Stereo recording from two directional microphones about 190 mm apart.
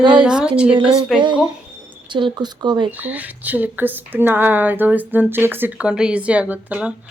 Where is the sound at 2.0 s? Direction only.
25° right (ahead or behind).